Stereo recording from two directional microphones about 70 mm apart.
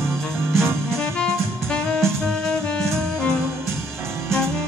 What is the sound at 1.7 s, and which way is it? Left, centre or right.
Saxophone, centre.